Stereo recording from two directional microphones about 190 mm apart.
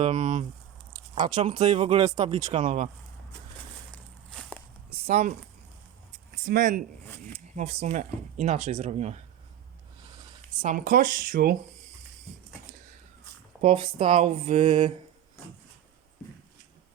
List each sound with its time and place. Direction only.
0.0 s speech: 40° right (ahead or behind)
3.9 s a sound: 5° left (ahead or behind)
5.0 s speech: 35° right (ahead or behind)
6.3 s speech: 50° right (ahead or behind)
7.5 s speech: 35° right (ahead or behind)
10.6 s speech: 45° right (ahead or behind)
13.6 s speech: 30° right (ahead or behind)